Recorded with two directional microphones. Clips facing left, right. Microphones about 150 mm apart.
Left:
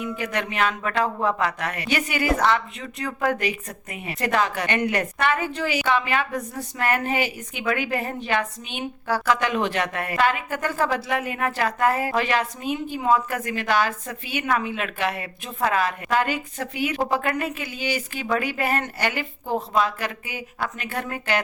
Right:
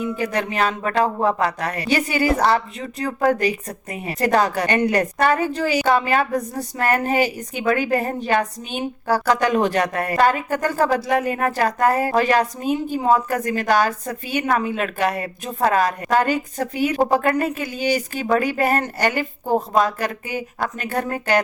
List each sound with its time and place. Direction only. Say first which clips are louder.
0.2 s a woman's voice: right 2 dB; 35° right (ahead or behind)